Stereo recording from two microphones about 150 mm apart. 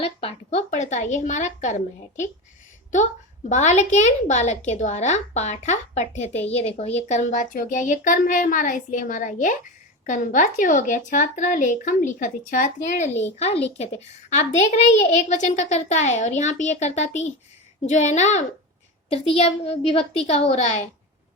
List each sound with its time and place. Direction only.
0.0 s a child's voice: 40° left (ahead or behind)
3.5 s a child's voice: 50° left (ahead or behind)
13.4 s a child's voice: 45° left (ahead or behind)